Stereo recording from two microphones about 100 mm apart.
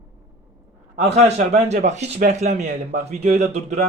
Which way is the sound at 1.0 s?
90° right.